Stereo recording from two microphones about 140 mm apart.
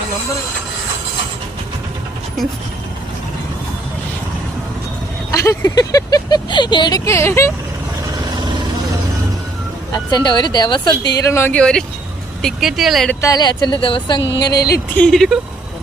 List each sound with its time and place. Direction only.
5.3 s speech: 20° left (ahead or behind)
9.9 s speech: 30° left (ahead or behind)
11.3 s speech: 15° left (ahead or behind); by 13.1 s centre (ahead or behind)
13.2 s speech: 30° left (ahead or behind)
14.9 s speech: 5° left (ahead or behind)